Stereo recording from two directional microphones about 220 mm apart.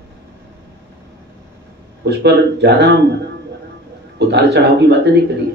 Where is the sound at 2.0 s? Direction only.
50° right (ahead or behind).